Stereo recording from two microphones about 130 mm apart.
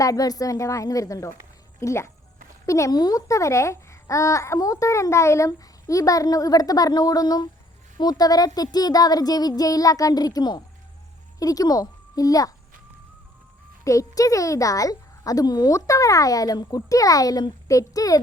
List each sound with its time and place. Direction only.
0.0 s a child's voice: 30° left (ahead or behind)
13.8 s a child's voice: 25° left (ahead or behind)